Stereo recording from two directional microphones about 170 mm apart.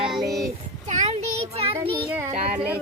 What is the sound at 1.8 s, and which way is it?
Speech, 30° right (ahead or behind).